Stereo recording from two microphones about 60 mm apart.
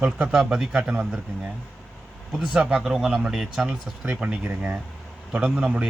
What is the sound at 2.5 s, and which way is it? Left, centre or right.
Speech, centre.